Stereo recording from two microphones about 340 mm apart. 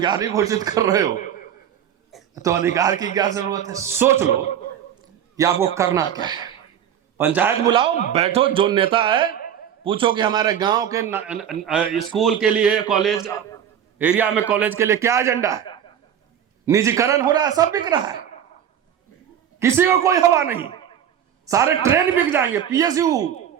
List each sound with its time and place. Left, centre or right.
0.0 s a man's voice: centre
5.4 s a man's voice: centre
9.2 s a sound: left
9.8 s a man's voice: centre
14.0 s a man's voice: centre
16.6 s a man's voice: centre
19.5 s a man's voice: centre